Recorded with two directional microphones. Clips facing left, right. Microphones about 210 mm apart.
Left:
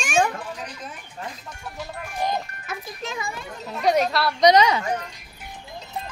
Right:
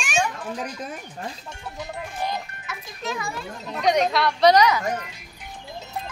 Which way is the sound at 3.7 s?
5° left (ahead or behind).